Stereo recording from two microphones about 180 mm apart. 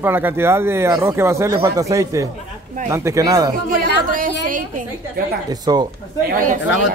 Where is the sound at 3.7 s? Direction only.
50° right (ahead or behind).